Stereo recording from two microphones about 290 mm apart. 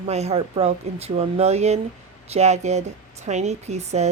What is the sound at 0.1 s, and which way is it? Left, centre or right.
Speech, right.